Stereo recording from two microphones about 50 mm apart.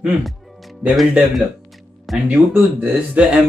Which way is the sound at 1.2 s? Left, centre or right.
Centre.